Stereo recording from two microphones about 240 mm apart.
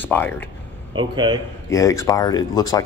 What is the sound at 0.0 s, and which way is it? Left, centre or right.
Speech, centre.